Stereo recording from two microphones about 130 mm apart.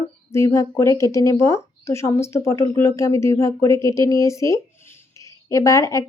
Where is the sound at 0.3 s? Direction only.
20° left (ahead or behind).